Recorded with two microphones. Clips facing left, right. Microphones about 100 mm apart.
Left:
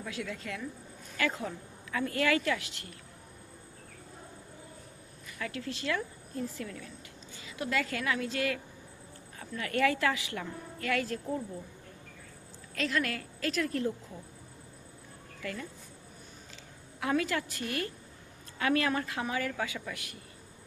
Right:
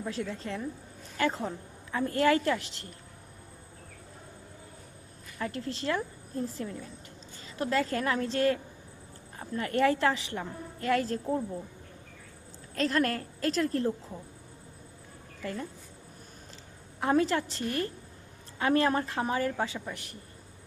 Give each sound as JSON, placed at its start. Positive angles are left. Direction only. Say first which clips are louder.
{"t": 0.1, "sound": "a woman's voice", "louder": "right 2 dB", "side_deg": -35}
{"t": 5.4, "sound": "a woman's voice", "louder": "right 3 dB", "side_deg": -35}
{"t": 7.4, "sound": "a woman's voice", "louder": "right 4 dB", "side_deg": -35}
{"t": 12.7, "sound": "a woman's voice", "louder": "right 4 dB", "side_deg": -35}
{"t": 17.0, "sound": "a woman's voice", "louder": "right 4 dB", "side_deg": -35}